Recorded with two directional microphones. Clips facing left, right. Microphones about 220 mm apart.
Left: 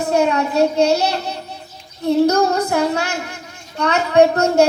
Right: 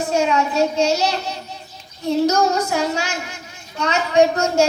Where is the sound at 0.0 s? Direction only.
60° left (ahead or behind).